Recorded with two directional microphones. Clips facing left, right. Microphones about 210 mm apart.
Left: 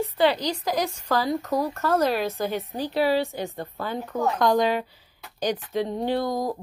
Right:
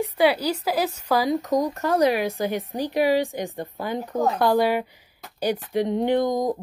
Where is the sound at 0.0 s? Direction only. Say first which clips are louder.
Right 2 dB; 10° right (ahead or behind).